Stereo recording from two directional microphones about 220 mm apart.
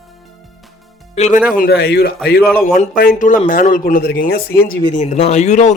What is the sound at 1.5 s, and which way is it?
Speech, 45° left (ahead or behind).